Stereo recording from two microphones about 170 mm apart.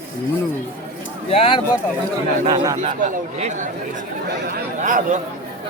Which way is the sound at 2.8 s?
45° right (ahead or behind).